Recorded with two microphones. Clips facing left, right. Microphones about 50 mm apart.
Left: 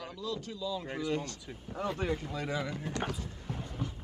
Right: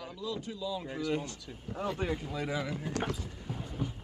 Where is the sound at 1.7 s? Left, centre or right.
Centre.